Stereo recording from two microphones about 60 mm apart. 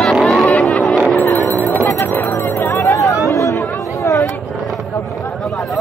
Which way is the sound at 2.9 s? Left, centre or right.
Left.